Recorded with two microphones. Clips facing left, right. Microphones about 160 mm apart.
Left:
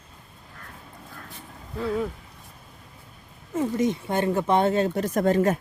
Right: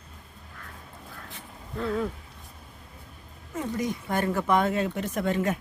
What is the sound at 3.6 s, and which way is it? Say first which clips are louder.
Speech: left 6 dB; 25° left (ahead or behind).